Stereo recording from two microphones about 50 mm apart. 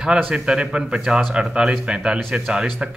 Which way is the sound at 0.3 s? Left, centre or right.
Centre.